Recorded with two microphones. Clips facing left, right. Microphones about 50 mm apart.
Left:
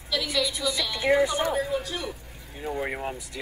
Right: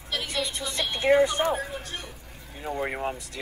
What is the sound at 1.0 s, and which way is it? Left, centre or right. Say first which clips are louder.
Speech: right 2 dB; centre.